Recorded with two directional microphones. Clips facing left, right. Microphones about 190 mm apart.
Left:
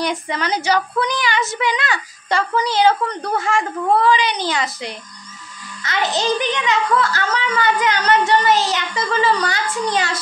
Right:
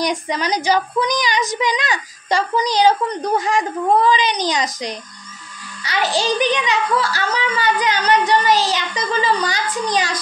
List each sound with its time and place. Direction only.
0.0 s a woman's voice: 15° right (ahead or behind)